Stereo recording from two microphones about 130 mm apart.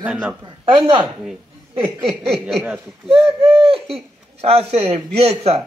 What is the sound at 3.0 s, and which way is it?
Speech, 45° right (ahead or behind).